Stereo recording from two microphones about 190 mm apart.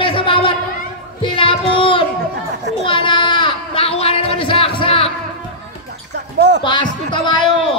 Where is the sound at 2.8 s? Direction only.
25° left (ahead or behind).